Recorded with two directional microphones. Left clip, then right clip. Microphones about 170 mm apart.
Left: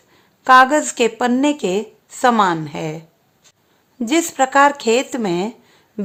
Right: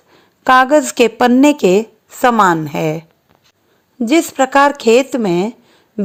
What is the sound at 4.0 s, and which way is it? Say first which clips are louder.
Speech: right 4 dB; 25° right (ahead or behind).